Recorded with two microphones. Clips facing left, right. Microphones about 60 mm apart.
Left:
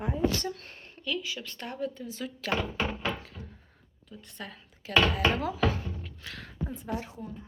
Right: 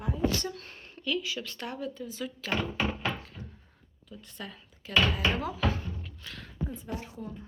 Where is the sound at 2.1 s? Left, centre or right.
Left.